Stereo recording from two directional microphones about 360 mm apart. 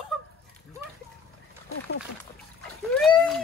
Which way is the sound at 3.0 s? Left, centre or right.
Centre.